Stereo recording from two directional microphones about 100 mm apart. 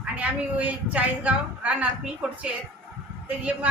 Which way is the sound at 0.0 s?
15° right (ahead or behind).